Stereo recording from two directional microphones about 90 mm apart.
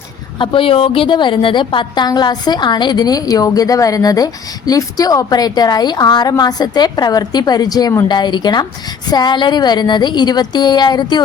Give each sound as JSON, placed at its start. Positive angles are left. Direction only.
{"t": 0.3, "sound": "a woman's voice", "side_deg": 70}
{"t": 2.0, "sound": "a woman's voice", "side_deg": 50}